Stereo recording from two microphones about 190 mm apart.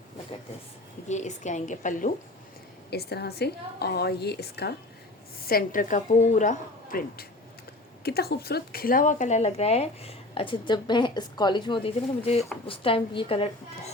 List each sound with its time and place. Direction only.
1.0 s speech: 40° left (ahead or behind)
2.9 s a woman's voice: 60° left (ahead or behind)
8.0 s a woman's voice: 55° left (ahead or behind); by 13.9 s 30° left (ahead or behind)